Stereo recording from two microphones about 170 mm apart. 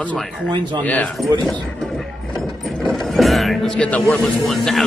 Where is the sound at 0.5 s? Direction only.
25° right (ahead or behind).